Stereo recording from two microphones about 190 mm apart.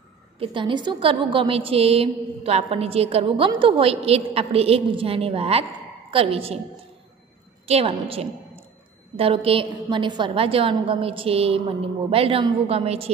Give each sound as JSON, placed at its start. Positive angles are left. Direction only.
{"t": 0.4, "sound": "a woman's voice", "side_deg": -25}
{"t": 7.6, "sound": "a woman's voice", "side_deg": -30}